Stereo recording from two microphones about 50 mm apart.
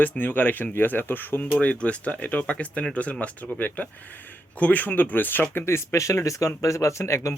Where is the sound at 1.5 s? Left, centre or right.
Left.